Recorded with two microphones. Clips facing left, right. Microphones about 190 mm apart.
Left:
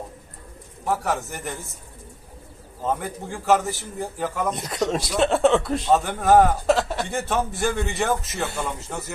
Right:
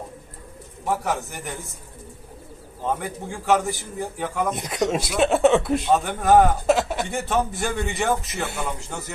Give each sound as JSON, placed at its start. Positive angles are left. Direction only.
{"t": 0.9, "sound": "a man's voice", "side_deg": 0}
{"t": 2.8, "sound": "a man's voice", "side_deg": 0}